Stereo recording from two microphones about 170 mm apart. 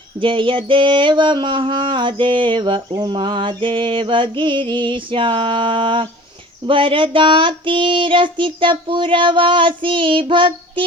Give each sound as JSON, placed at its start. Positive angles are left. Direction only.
{"t": 0.2, "sound": "mantra", "side_deg": -30}